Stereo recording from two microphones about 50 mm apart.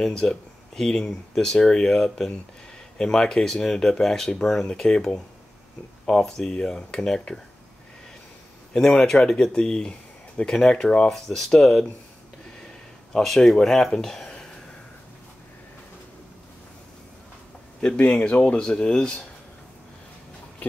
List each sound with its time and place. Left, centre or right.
0.0 s speech: centre
8.7 s speech: centre
13.1 s speech: centre
18.3 s speech: left